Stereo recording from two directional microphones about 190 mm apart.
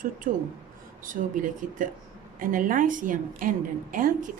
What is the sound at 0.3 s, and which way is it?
Speech, 45° right (ahead or behind).